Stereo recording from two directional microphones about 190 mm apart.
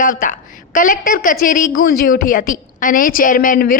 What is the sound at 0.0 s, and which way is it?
A woman's voice, 45° left (ahead or behind).